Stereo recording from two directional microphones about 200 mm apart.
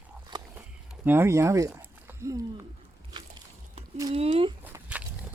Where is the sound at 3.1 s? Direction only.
20° right (ahead or behind).